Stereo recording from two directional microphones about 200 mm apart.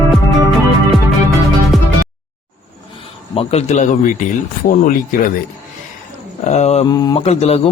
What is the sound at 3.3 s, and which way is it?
A man's voice, 30° left (ahead or behind).